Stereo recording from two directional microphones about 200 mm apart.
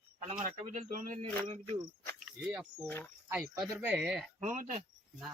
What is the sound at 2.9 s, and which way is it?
Speech, 10° left (ahead or behind).